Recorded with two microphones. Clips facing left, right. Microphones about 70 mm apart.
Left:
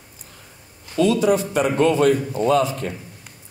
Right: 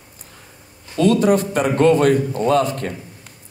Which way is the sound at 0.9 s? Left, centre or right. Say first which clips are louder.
Right 2 dB; right.